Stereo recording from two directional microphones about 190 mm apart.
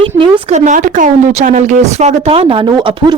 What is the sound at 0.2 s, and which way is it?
A woman's voice, 40° right (ahead or behind).